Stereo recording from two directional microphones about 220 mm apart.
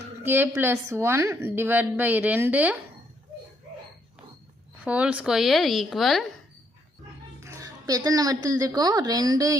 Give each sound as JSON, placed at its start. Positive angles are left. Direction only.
{"t": 0.2, "sound": "a woman's voice", "side_deg": -10}
{"t": 4.9, "sound": "speech", "side_deg": -5}
{"t": 7.4, "sound": "speech", "side_deg": -15}